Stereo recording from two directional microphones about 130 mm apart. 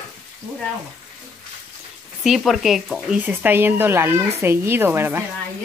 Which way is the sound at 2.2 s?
Centre (ahead or behind).